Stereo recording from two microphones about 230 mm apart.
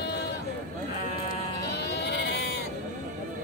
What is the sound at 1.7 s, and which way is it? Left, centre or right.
Sheep, left.